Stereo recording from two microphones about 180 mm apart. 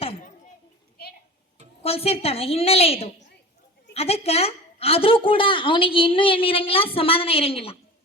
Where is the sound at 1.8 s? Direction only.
35° left (ahead or behind).